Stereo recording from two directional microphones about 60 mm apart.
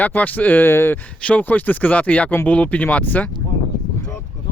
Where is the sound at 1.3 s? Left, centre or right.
Left.